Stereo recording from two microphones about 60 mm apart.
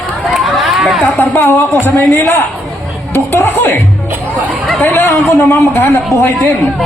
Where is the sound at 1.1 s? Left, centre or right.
Left.